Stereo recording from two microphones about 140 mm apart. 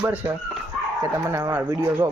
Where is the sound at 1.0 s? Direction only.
20° right (ahead or behind).